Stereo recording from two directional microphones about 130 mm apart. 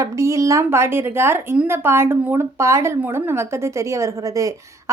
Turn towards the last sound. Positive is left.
turn(degrees=-25)  # may be behind; listen again after turning